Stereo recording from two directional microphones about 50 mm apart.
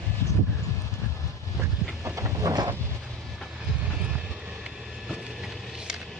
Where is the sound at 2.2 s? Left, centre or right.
Right.